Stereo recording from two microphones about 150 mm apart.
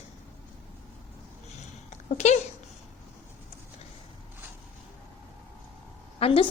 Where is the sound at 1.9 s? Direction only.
50° left (ahead or behind).